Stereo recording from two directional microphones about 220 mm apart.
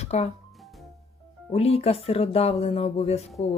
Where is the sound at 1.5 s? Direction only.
25° left (ahead or behind).